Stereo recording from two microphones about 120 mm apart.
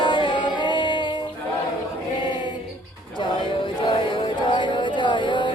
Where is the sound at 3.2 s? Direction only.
40° left (ahead or behind).